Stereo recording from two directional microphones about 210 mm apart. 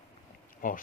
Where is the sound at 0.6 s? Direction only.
40° left (ahead or behind).